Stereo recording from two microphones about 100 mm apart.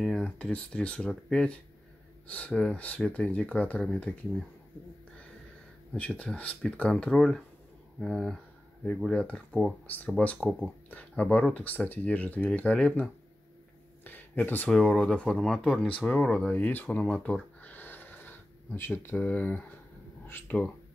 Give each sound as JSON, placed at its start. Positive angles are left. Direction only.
{"t": 0.0, "sound": "speech", "side_deg": 5}
{"t": 5.9, "sound": "speech", "side_deg": 15}
{"t": 14.0, "sound": "a sound", "side_deg": 20}
{"t": 14.7, "sound": "speech", "side_deg": 10}
{"t": 16.4, "sound": "a sound", "side_deg": 15}
{"t": 19.1, "sound": "speech", "side_deg": 15}